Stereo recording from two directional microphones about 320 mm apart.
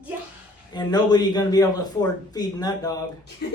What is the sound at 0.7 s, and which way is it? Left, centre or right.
Speech, centre.